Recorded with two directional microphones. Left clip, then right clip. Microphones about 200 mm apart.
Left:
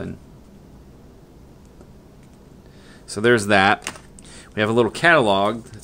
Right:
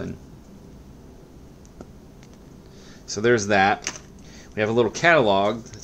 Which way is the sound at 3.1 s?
20° left (ahead or behind).